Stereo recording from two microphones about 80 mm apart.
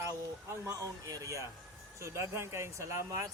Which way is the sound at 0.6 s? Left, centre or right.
Right.